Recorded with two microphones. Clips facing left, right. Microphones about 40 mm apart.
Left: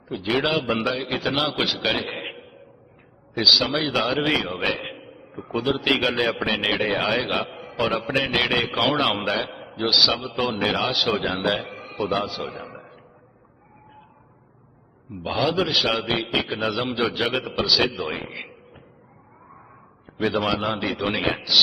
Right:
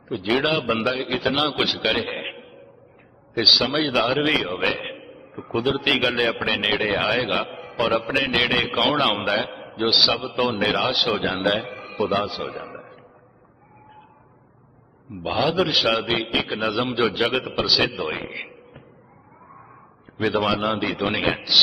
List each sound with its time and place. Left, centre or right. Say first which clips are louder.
0.1 s a man's voice: right 1 dB; centre
7.9 s a man's voice: right 3 dB; centre
8.1 s a man's voice: right 1 dB; centre
15.2 s a man's voice: right 1 dB; centre
20.1 s a man's voice: right 1 dB; centre